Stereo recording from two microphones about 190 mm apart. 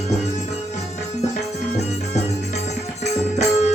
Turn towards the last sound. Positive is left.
turn(degrees=35)  # may be behind; listen again after turning